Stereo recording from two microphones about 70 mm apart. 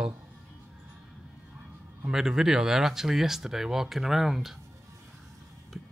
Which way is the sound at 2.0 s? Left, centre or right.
Centre.